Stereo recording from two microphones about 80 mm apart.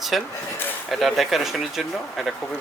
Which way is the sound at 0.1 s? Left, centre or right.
Centre.